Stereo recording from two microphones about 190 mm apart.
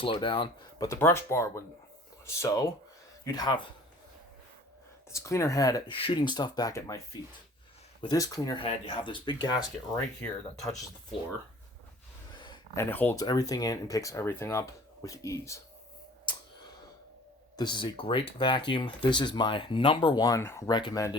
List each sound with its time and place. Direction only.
0.0 s speech: 25° left (ahead or behind)
0.9 s speech: 15° left (ahead or behind)
5.1 s speech: 15° left (ahead or behind)
8.0 s speech: 20° left (ahead or behind)
12.7 s speech: 10° left (ahead or behind)
17.6 s speech: 25° left (ahead or behind)